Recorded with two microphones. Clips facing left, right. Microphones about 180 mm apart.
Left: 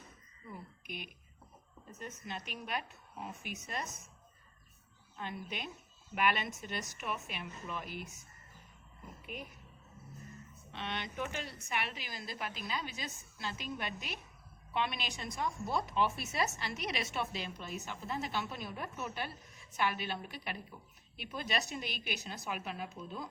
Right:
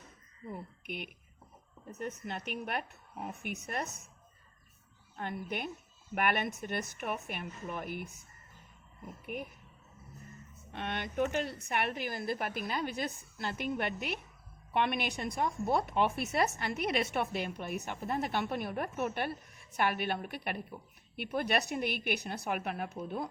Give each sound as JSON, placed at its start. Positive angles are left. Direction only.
{"t": 0.5, "sound": "a woman's voice", "side_deg": -60}
{"t": 5.1, "sound": "a woman's voice", "side_deg": -55}
{"t": 9.2, "sound": "speech", "side_deg": -55}
{"t": 10.7, "sound": "a woman's voice", "side_deg": -50}